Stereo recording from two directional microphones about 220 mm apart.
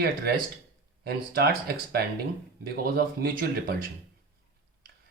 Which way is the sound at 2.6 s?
45° right (ahead or behind).